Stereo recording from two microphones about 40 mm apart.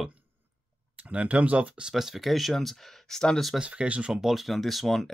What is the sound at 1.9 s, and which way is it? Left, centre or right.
Speech, centre.